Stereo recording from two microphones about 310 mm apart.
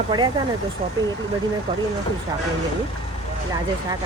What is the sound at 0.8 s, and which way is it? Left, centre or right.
Speech, centre.